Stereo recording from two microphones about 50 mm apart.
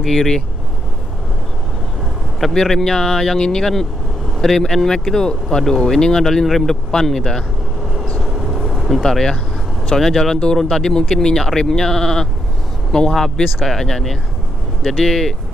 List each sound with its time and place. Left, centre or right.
0.0 s speech: centre
2.5 s speech: centre
8.2 s vehicle: centre
9.0 s speech: centre